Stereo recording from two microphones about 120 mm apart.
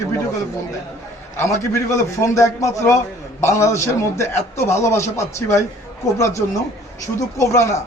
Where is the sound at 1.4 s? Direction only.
25° left (ahead or behind).